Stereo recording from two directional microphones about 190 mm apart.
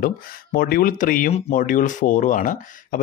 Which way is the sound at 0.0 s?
50° left (ahead or behind).